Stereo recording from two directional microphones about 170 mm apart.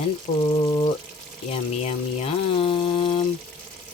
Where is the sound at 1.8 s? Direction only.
35° left (ahead or behind).